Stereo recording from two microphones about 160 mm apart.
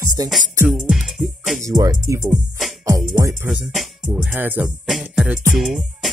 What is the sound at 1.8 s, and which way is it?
Speech, 25° right (ahead or behind).